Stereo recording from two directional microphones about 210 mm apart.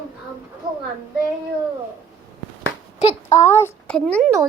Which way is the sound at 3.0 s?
30° left (ahead or behind).